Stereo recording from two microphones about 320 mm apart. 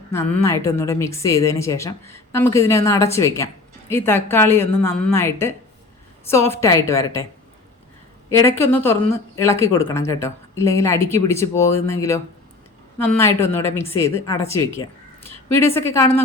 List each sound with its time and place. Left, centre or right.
0.1 s speech: centre
8.3 s speech: centre